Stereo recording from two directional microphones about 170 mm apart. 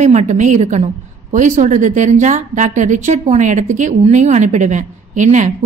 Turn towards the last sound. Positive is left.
turn(degrees=-45)  # may be behind; listen again after turning